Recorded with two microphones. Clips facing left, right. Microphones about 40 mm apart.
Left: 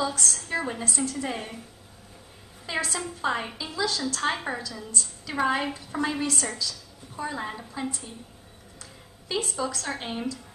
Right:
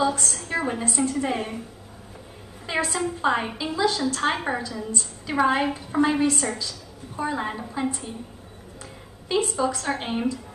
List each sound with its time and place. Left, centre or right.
0.0 s a woman's voice: right
2.6 s a woman's voice: right
9.3 s a woman's voice: right